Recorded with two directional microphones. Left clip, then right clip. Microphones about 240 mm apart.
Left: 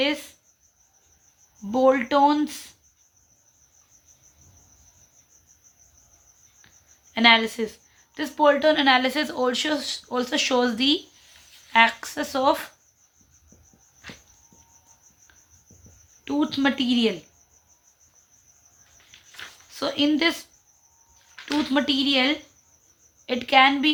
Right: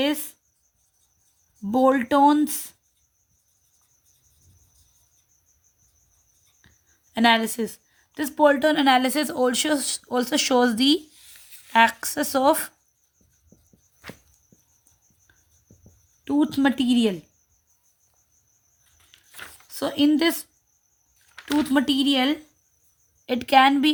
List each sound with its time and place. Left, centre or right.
0.0 s a woman's voice: right
1.7 s a woman's voice: right
7.1 s a woman's voice: right
16.2 s a woman's voice: right
19.7 s a woman's voice: right
21.7 s a woman's voice: right